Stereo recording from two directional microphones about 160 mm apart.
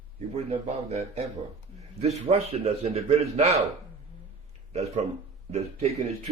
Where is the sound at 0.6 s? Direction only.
45° right (ahead or behind).